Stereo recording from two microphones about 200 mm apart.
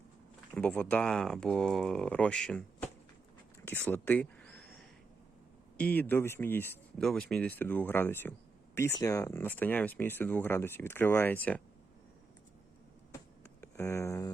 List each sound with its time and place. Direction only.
0.5 s speech: 5° left (ahead or behind)
3.7 s a sound: 10° left (ahead or behind)
5.7 s speech: 10° left (ahead or behind)
13.6 s speech: 15° left (ahead or behind)